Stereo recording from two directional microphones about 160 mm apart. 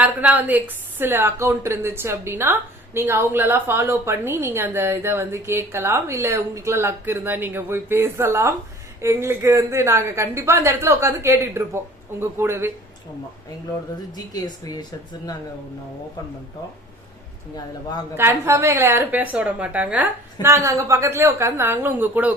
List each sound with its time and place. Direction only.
0.0 s a woman's voice: 10° right (ahead or behind)
14.2 s speech: 25° left (ahead or behind)
18.2 s a woman's voice: 15° right (ahead or behind)